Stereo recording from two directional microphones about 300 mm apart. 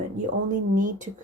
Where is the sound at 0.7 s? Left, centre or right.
Right.